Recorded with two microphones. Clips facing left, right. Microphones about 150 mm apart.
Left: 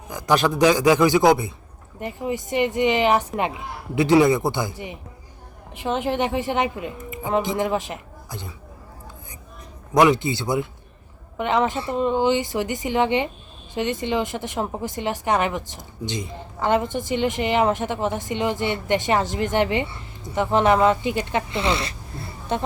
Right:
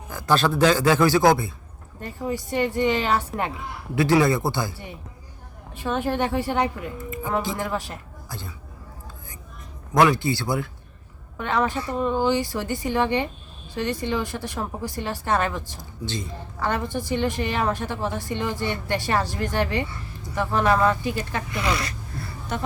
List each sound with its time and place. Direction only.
0.1 s a man's voice: 15° left (ahead or behind)
9.9 s speech: 20° left (ahead or behind)